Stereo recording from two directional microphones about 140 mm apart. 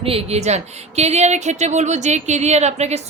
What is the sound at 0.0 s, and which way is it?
A woman's voice, 45° right (ahead or behind).